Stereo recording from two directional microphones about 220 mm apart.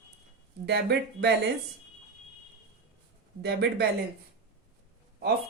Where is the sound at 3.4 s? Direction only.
50° right (ahead or behind).